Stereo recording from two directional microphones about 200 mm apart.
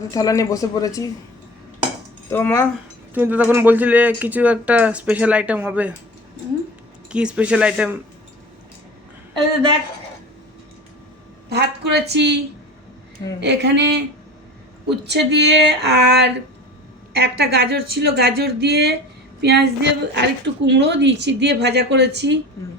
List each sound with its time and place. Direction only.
0.1 s speech: 15° left (ahead or behind)
2.3 s speech: 10° left (ahead or behind)
3.2 s speech: 10° right (ahead or behind)
7.1 s speech: 5° right (ahead or behind)
11.4 s speech: 55° right (ahead or behind)
13.4 s a woman's voice: 60° right (ahead or behind)